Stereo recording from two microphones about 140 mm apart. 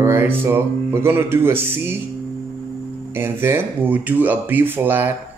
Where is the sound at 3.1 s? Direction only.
15° right (ahead or behind).